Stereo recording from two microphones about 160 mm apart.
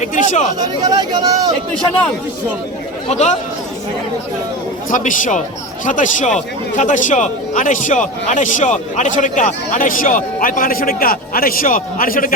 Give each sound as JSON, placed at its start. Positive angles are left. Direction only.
{"t": 0.0, "sound": "speech", "side_deg": 50}
{"t": 0.6, "sound": "speech", "side_deg": -25}
{"t": 3.1, "sound": "speech", "side_deg": 45}
{"t": 4.9, "sound": "a man's voice", "side_deg": 55}